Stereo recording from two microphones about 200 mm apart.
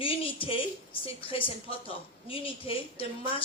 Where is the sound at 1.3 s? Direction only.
30° left (ahead or behind).